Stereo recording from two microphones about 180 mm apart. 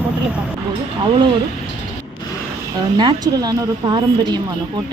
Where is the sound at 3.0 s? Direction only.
20° right (ahead or behind).